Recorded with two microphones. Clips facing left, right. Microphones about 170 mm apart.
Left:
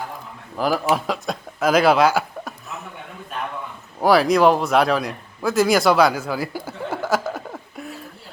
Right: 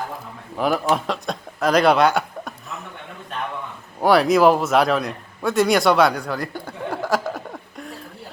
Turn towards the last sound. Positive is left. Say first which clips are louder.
# left 1 dB
turn(degrees=5)  # may be behind; listen again after turning